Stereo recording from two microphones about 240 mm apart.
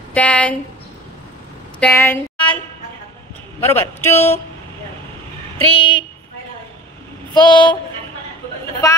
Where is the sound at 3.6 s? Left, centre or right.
Centre.